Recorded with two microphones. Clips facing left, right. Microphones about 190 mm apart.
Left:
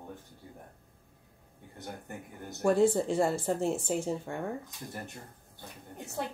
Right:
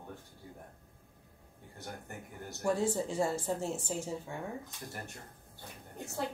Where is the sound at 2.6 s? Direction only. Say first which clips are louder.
Left 7 dB; 65° left (ahead or behind).